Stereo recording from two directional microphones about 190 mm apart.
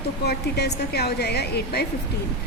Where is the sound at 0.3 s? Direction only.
60° left (ahead or behind).